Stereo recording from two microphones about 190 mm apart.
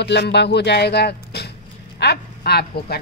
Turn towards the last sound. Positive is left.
turn(degrees=55)  # may be behind; listen again after turning